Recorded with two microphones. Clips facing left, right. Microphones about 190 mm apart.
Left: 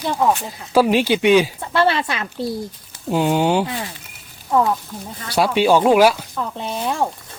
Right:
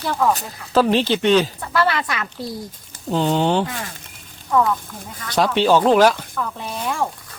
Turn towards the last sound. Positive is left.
turn(degrees=25)  # may be behind; listen again after turning